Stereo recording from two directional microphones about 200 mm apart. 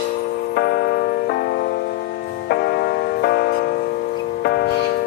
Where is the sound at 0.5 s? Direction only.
50° left (ahead or behind).